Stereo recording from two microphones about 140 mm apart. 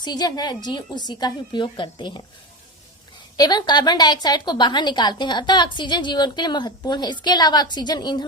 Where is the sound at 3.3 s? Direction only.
30° left (ahead or behind).